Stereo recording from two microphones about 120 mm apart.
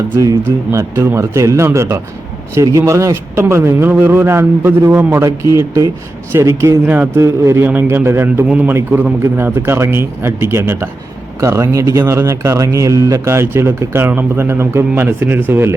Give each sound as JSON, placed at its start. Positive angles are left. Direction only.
{"t": 0.2, "sound": "a man's voice", "side_deg": -25}
{"t": 6.3, "sound": "a man's voice", "side_deg": -25}